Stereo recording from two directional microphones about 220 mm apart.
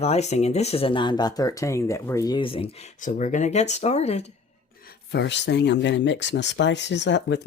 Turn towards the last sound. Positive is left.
turn(degrees=55)  # may be behind; listen again after turning